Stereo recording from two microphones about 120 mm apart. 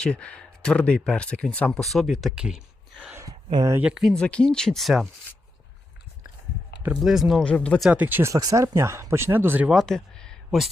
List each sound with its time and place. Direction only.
0.0 s speech: 5° left (ahead or behind)
6.9 s speech: 5° right (ahead or behind)
7.4 s speech: 10° left (ahead or behind)
7.8 s speech: 10° right (ahead or behind)
9.6 s speech: centre (ahead or behind)